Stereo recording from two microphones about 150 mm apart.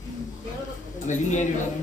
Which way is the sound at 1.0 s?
55° left (ahead or behind).